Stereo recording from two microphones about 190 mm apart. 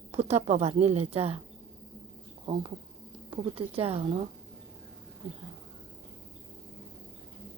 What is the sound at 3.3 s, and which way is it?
Speech, 30° right (ahead or behind).